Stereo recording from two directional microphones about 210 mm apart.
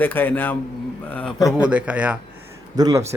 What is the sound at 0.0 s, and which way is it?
Speech, 10° left (ahead or behind).